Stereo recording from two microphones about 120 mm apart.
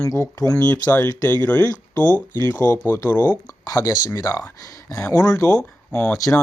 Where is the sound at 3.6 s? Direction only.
30° left (ahead or behind).